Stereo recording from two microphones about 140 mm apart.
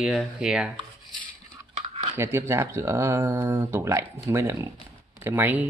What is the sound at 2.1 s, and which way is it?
Speech, 20° right (ahead or behind).